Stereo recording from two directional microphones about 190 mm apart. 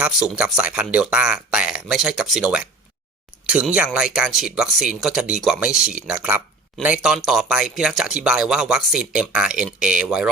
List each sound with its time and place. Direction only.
0.0 s speech: 5° right (ahead or behind)